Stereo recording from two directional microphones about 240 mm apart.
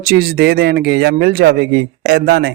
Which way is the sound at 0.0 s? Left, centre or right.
Right.